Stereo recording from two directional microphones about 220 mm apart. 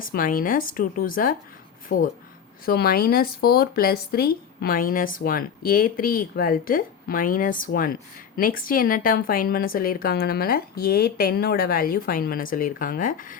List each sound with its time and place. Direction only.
0.0 s speech: 40° left (ahead or behind)